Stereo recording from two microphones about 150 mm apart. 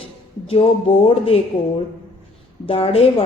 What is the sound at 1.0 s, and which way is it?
Speech, 40° left (ahead or behind).